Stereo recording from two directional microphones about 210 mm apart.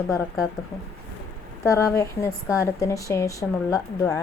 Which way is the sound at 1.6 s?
15° left (ahead or behind).